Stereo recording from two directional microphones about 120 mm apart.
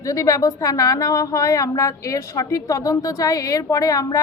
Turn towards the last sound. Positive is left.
turn(degrees=30)  # may be behind; listen again after turning